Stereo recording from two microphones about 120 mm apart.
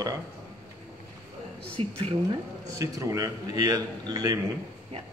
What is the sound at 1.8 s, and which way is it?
Speech, 55° right (ahead or behind).